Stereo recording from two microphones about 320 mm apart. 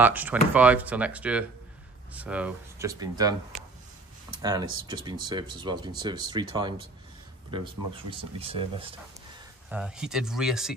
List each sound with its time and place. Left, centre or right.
0.0 s speech: centre
7.9 s speech: centre
9.7 s speech: centre